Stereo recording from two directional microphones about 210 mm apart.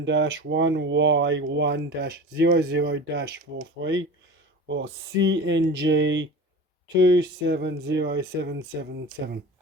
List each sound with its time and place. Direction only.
0.0 s speech: 60° right (ahead or behind)